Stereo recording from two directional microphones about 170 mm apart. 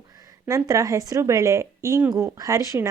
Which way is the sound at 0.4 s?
20° right (ahead or behind).